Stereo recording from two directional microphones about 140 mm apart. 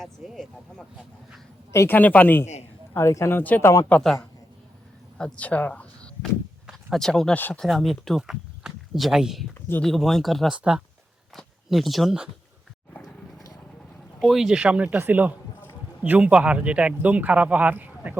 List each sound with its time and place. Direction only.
0.0 s speech: centre (ahead or behind)
1.7 s speech: 15° left (ahead or behind)
7.6 s speech: centre (ahead or behind)
9.6 s speech: 15° left (ahead or behind)
9.8 s speech: centre (ahead or behind)
14.2 s speech: centre (ahead or behind)